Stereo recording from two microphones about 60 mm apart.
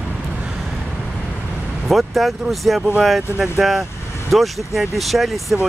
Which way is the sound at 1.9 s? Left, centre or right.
Centre.